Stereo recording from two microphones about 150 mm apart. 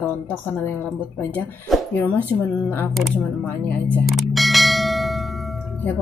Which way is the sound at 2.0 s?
10° left (ahead or behind).